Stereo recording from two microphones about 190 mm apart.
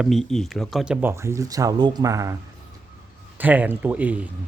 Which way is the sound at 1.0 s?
15° right (ahead or behind).